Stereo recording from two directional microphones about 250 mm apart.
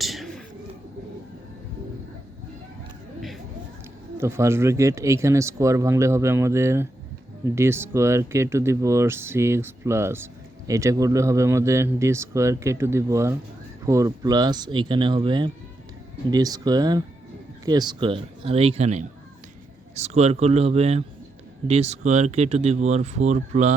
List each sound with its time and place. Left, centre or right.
0.0 s bird: centre
4.2 s speech: centre; by 23.7 s right